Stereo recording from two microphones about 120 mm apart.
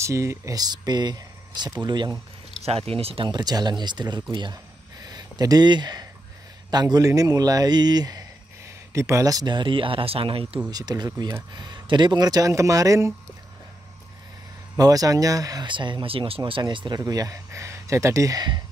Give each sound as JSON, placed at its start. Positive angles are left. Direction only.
{"t": 0.0, "sound": "speech", "side_deg": -25}
{"t": 2.6, "sound": "speech", "side_deg": -55}
{"t": 10.7, "sound": "speech", "side_deg": -35}
{"t": 14.8, "sound": "speech", "side_deg": -30}